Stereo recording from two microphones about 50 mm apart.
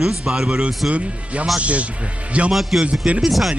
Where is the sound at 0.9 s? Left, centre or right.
Right.